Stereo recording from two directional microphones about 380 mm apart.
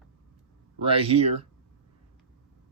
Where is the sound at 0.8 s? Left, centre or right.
Centre.